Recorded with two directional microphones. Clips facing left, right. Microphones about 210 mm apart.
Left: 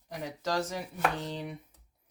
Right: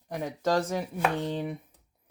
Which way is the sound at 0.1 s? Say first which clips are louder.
Right 6 dB; 50° right (ahead or behind).